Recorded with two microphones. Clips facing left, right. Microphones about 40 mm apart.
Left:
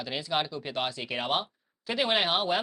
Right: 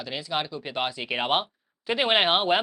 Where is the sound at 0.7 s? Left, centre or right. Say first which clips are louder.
Right 4 dB; centre.